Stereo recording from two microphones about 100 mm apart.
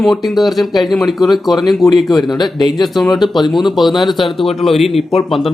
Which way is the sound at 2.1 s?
45° left (ahead or behind).